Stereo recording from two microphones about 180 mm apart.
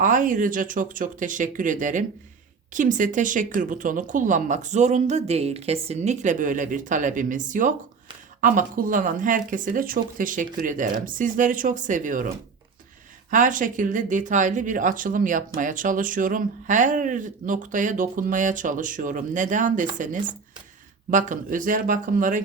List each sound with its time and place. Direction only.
0.0 s speech: 50° right (ahead or behind)
13.3 s speech: 45° right (ahead or behind)